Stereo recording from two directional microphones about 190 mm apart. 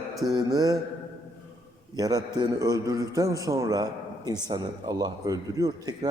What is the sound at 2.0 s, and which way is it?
A man's voice, 20° right (ahead or behind).